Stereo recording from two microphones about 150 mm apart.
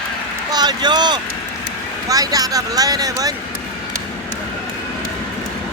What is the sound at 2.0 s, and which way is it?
Speech, 25° right (ahead or behind).